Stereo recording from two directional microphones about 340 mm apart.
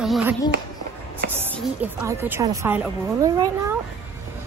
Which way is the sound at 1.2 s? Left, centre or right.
Right.